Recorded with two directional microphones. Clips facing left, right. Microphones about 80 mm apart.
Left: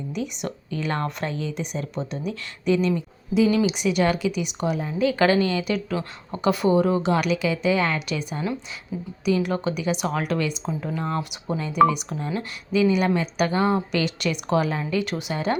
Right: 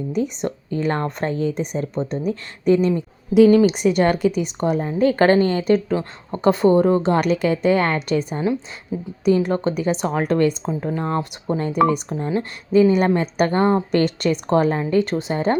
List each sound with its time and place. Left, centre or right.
0.4 s a woman's voice: right
8.9 s a woman's voice: right